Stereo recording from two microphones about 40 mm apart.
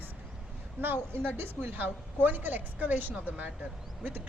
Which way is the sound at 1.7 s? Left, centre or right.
Right.